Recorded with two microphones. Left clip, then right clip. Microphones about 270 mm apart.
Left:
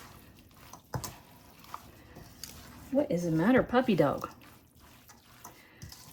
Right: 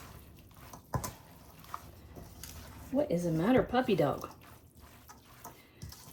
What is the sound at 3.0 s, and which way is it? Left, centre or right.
Speech, left.